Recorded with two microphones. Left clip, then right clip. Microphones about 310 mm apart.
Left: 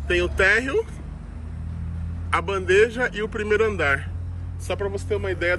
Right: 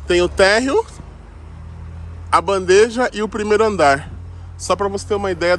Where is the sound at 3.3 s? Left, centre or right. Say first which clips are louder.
Right 6 dB; centre.